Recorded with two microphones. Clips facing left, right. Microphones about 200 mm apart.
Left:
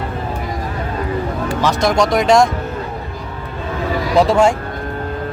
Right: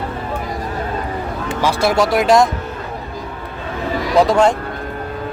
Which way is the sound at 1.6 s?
5° right (ahead or behind).